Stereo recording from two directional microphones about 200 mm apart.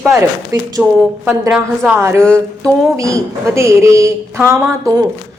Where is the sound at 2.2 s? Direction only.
5° left (ahead or behind).